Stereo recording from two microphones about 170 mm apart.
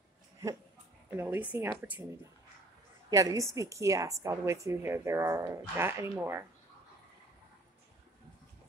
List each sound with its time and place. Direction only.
0.4 s a woman's voice: 15° right (ahead or behind)
3.1 s a woman's voice: 20° right (ahead or behind)